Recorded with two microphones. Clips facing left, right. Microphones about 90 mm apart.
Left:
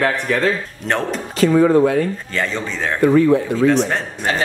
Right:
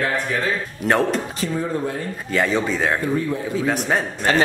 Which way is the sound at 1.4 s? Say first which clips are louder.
Left 11 dB; 85° left.